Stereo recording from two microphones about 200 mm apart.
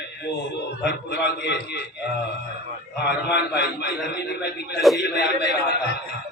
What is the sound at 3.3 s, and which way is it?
Speech, 55° left (ahead or behind).